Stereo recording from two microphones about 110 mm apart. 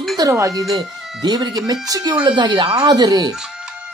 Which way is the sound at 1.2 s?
40° right (ahead or behind).